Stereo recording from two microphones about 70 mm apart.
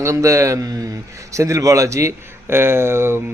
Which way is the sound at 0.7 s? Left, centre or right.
Right.